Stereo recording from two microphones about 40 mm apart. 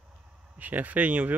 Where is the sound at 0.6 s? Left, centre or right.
Right.